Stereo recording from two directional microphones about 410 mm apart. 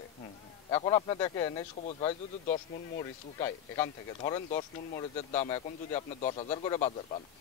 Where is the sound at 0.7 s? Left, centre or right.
Centre.